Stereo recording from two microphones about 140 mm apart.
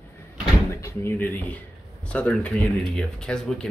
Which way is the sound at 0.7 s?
20° left (ahead or behind).